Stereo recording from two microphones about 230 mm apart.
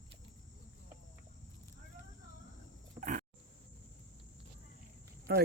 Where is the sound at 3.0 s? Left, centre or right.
Right.